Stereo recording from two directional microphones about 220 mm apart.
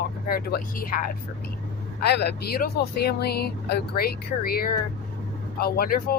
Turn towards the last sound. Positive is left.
turn(degrees=40)  # may be behind; listen again after turning